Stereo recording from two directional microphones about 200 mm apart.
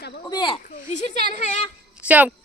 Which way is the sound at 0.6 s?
40° left (ahead or behind).